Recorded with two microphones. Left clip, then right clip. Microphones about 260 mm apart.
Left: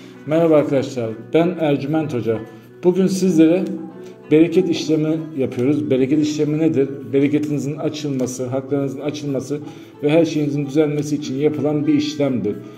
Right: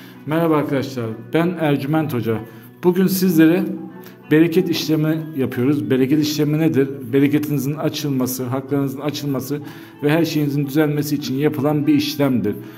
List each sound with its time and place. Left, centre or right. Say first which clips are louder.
0.3 s a man's voice: left 4 dB; centre
11.4 s a man's voice: left 1 dB; right
11.8 s a man's voice: right 1 dB; right